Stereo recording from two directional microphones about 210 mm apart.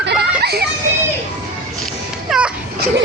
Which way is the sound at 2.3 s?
5° right (ahead or behind).